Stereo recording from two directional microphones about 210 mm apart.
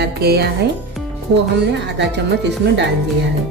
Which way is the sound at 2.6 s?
50° right (ahead or behind).